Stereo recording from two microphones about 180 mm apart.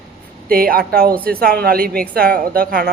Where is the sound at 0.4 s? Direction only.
55° right (ahead or behind).